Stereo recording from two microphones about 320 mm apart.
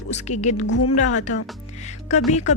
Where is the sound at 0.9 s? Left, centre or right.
Left.